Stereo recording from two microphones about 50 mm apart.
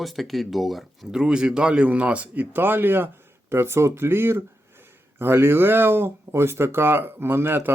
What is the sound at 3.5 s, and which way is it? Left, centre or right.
Speech, right.